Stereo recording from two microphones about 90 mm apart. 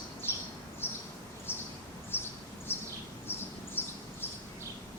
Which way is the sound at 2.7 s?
25° left (ahead or behind).